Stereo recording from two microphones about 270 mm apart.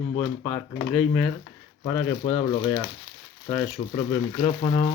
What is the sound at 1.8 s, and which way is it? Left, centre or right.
Speech, centre.